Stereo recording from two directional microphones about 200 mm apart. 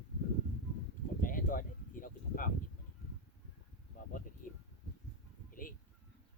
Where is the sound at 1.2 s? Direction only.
45° left (ahead or behind).